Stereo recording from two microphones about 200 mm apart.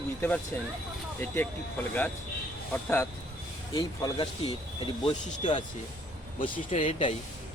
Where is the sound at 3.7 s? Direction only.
25° left (ahead or behind).